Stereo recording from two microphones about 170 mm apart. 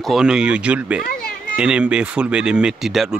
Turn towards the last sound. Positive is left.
turn(degrees=0)  # may be behind; listen again after turning